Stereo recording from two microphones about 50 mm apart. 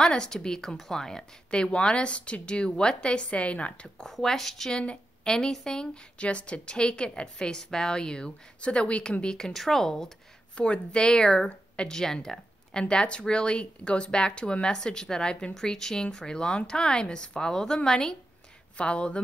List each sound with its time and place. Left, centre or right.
0.0 s speech: centre
1.5 s a woman's voice: centre
4.0 s a woman's voice: centre
10.5 s a woman's voice: left